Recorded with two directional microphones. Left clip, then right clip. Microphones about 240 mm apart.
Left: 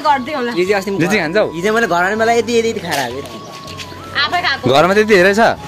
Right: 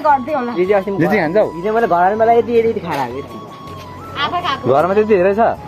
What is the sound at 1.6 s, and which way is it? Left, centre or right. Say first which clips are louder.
Speech: right 1 dB; left.